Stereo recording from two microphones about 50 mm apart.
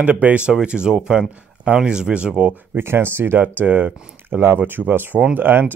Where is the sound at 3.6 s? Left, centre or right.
Right.